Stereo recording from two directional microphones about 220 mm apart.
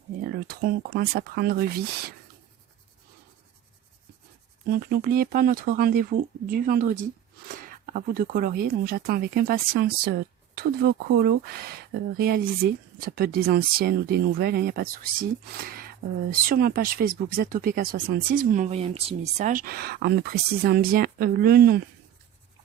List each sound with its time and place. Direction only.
0.3 s speech: 45° right (ahead or behind)
4.9 s speech: 40° right (ahead or behind)